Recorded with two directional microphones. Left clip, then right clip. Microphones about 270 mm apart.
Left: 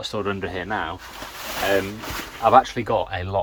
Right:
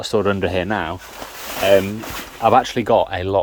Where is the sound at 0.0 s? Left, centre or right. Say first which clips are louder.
Right 8 dB; right.